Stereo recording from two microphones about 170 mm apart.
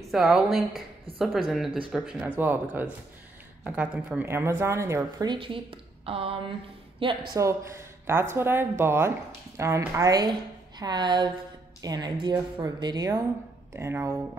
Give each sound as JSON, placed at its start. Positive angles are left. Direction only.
{"t": 0.1, "sound": "a woman's voice", "side_deg": 0}
{"t": 7.3, "sound": "a woman's voice", "side_deg": -15}